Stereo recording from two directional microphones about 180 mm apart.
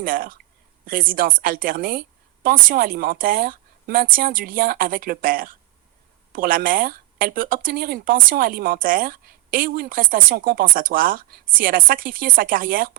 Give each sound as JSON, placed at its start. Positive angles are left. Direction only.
{"t": 0.0, "sound": "speech", "side_deg": -50}